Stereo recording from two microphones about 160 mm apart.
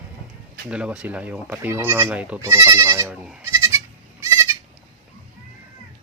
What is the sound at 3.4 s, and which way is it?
Goat, 20° right (ahead or behind).